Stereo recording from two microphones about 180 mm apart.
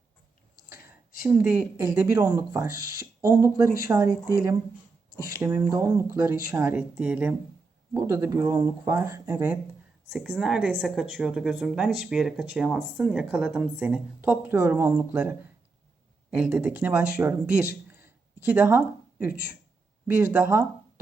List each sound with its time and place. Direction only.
0.7 s speech: 15° right (ahead or behind)
7.9 s speech: 15° right (ahead or behind)
10.1 s a woman's voice: centre (ahead or behind)
20.1 s speech: 15° right (ahead or behind)